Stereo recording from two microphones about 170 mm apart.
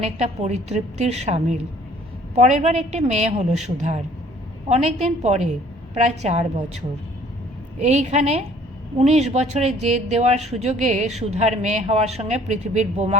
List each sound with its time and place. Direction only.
0.0 s speech: 40° right (ahead or behind)
7.8 s speech: 40° right (ahead or behind)